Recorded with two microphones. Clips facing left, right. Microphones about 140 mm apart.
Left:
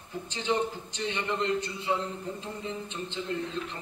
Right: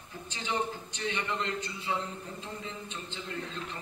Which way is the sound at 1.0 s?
20° left (ahead or behind).